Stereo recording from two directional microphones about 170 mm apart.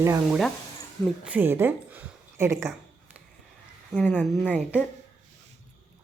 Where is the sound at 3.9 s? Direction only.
10° left (ahead or behind).